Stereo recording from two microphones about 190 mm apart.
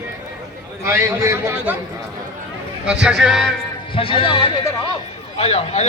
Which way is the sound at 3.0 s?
5° right (ahead or behind).